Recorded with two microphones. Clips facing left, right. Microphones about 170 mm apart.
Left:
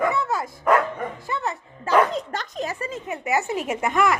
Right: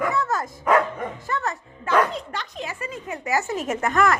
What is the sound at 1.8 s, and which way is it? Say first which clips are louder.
Bow-wow: left 2 dB; 45° left (ahead or behind).